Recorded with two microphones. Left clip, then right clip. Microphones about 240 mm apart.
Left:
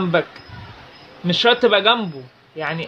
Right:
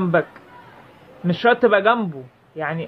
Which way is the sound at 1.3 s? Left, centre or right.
Centre.